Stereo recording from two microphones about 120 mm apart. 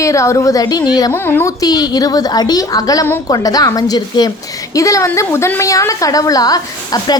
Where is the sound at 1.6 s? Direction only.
30° left (ahead or behind).